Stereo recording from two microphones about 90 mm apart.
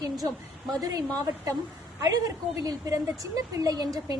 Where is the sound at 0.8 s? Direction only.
45° right (ahead or behind).